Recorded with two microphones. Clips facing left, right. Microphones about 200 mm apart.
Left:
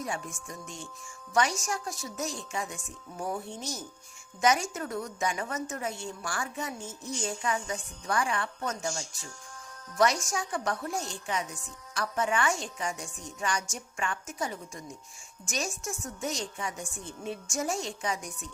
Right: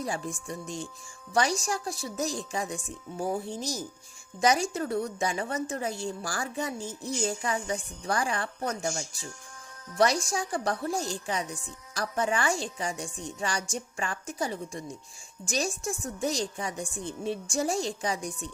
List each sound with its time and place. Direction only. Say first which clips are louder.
0.0 s a woman's voice: right 3 dB; 35° right (ahead or behind)
10.0 s a woman's voice: right 2 dB; 30° right (ahead or behind)